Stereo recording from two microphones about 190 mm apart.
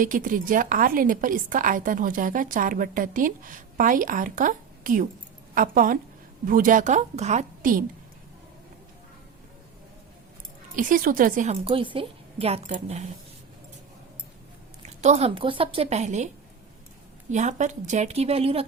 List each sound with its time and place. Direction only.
0.0 s a woman's voice: 45° right (ahead or behind)
10.8 s a woman's voice: 45° right (ahead or behind)
11.6 s a woman's voice: 25° right (ahead or behind)
15.0 s a woman's voice: 35° right (ahead or behind)
17.3 s a woman's voice: 40° right (ahead or behind)